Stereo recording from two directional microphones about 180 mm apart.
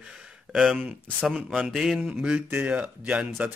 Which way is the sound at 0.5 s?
Centre (ahead or behind).